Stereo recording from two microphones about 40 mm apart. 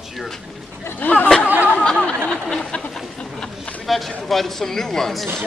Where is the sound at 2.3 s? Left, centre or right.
Centre.